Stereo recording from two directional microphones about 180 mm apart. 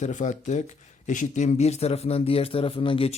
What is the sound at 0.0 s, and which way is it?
Speech, 45° left (ahead or behind).